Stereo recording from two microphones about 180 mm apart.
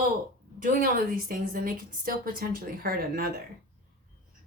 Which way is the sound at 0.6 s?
50° right (ahead or behind).